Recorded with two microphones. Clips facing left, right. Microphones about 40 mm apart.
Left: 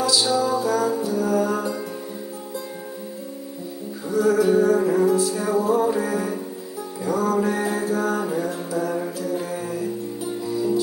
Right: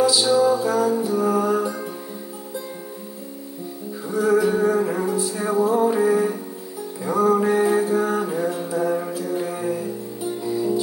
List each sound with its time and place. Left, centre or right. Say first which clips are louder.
0.0 s music: right 4 dB; centre
4.1 s music: left 1 dB; centre
8.9 s mantra: right 1 dB; centre
10.5 s music: even; right